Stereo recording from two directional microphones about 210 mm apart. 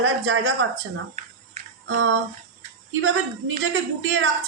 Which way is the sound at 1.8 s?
70° right (ahead or behind).